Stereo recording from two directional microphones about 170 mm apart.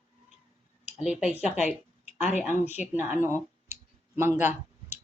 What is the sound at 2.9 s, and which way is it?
Speech, 10° right (ahead or behind).